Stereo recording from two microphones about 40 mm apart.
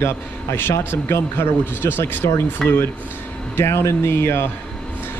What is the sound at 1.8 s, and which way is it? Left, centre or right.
Speech, left.